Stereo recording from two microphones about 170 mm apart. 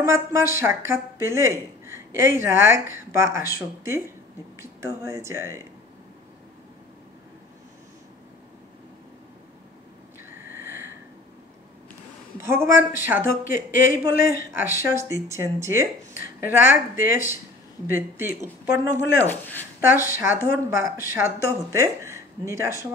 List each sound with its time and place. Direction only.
0.0 s a woman's voice: 15° right (ahead or behind)
10.4 s a sound: 15° right (ahead or behind)
12.4 s a woman's voice: 15° right (ahead or behind)
13.4 s speech: 90° right
13.9 s a woman's voice: 15° right (ahead or behind)
19.2 s speech: 10° left (ahead or behind)
19.9 s a woman's voice: 15° right (ahead or behind)